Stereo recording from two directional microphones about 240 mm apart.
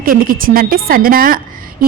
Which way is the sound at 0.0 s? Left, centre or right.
Right.